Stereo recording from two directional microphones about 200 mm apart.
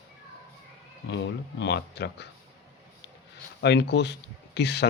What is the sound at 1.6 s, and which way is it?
Speech, 60° left (ahead or behind).